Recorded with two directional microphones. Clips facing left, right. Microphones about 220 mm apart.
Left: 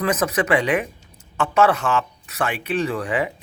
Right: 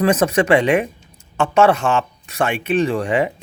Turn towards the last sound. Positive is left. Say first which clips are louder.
# right 5 dB
turn(degrees=-25)  # may be behind; listen again after turning